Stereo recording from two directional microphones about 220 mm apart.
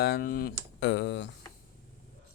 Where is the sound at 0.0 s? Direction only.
45° left (ahead or behind).